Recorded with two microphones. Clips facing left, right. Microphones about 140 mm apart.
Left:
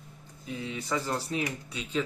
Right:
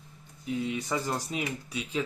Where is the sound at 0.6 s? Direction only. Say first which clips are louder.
Right 1 dB; 15° right (ahead or behind).